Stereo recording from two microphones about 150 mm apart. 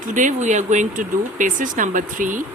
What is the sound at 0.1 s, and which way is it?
Speech, 55° right (ahead or behind).